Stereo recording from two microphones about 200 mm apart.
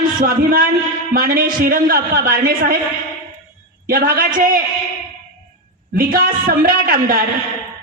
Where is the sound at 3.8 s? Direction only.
45° right (ahead or behind).